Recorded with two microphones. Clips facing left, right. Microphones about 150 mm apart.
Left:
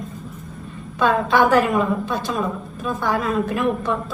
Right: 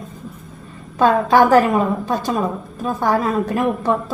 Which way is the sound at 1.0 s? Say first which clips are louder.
Right 4 dB; 40° right (ahead or behind).